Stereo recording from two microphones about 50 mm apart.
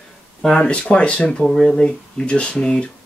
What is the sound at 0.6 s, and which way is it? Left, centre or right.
Speech, left.